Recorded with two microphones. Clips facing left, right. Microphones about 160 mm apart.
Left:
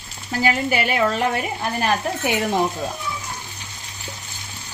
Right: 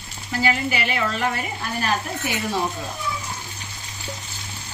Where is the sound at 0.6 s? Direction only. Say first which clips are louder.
Left 4 dB; 50° left (ahead or behind).